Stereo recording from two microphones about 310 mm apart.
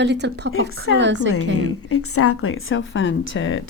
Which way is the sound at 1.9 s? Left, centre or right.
Left.